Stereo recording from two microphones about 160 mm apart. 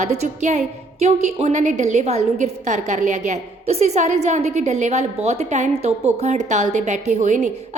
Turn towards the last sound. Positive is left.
turn(degrees=-50)  # may be behind; listen again after turning